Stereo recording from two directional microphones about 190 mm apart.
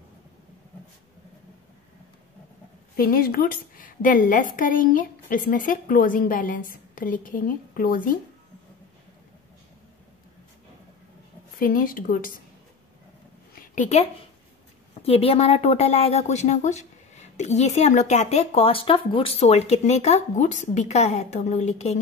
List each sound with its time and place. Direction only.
3.0 s a woman's voice: 50° left (ahead or behind)
11.5 s a woman's voice: 45° left (ahead or behind)
13.6 s a sound: 40° left (ahead or behind)
15.0 s speech: 30° left (ahead or behind)